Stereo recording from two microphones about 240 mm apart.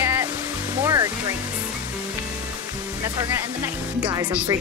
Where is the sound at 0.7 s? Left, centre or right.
Centre.